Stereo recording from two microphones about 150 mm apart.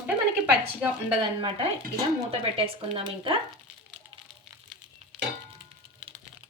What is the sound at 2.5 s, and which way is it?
Speech, 40° right (ahead or behind).